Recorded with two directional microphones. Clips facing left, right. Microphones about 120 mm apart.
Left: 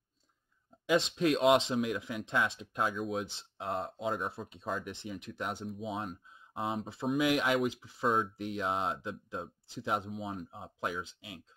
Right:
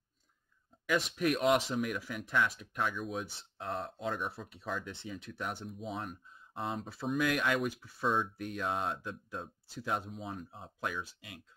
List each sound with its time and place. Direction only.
0.8 s speech: 25° left (ahead or behind)